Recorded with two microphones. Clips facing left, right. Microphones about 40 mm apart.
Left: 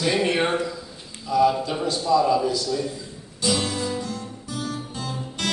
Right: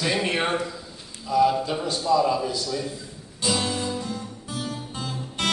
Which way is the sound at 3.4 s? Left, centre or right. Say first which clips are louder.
Left 1 dB; centre.